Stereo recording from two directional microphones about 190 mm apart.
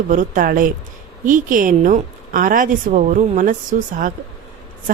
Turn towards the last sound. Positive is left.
turn(degrees=-45)  # may be behind; listen again after turning